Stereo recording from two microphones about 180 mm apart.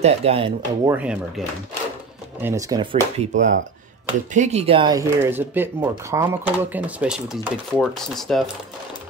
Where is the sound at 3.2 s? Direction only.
45° right (ahead or behind).